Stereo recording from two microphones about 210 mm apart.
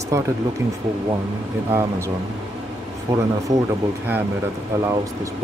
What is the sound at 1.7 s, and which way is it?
Speech, 10° right (ahead or behind).